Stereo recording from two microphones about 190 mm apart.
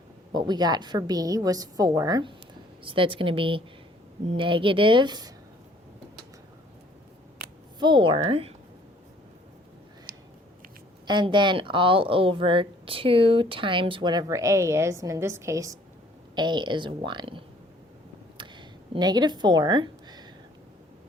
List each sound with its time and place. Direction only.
0.3 s speech: 20° right (ahead or behind)
7.8 s speech: 25° right (ahead or behind)
11.0 s speech: 25° right (ahead or behind)
18.3 s a sound: 25° right (ahead or behind)